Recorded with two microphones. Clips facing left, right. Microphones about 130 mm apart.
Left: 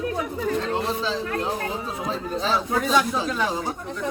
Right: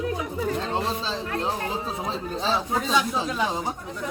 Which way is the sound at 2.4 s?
25° right (ahead or behind).